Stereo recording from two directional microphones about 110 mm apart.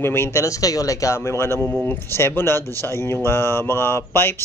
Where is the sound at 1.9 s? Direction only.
20° left (ahead or behind).